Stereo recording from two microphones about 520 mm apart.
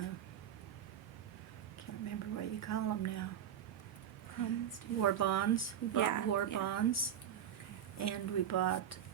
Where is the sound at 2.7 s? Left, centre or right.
Left.